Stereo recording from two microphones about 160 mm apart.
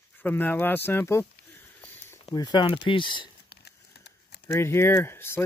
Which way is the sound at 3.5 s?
90° left.